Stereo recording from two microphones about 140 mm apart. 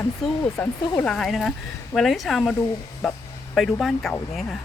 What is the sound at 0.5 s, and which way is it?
Speech, 20° left (ahead or behind).